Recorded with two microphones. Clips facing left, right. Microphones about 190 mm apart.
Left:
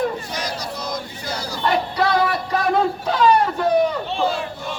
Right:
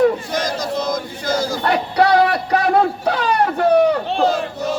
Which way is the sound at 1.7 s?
65° right (ahead or behind).